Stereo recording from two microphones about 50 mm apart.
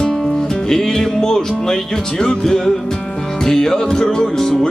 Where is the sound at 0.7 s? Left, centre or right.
Centre.